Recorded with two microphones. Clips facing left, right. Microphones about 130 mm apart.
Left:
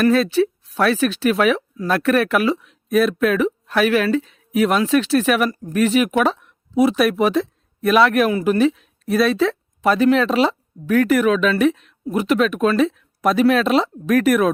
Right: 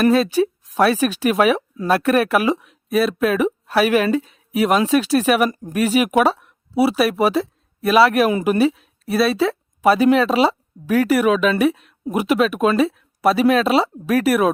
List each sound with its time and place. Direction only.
0.0 s speech: 15° right (ahead or behind)
8.3 s speech: 20° right (ahead or behind)
8.5 s speech: 10° right (ahead or behind)